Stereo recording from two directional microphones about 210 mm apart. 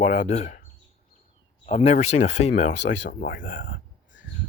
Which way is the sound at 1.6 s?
30° left (ahead or behind).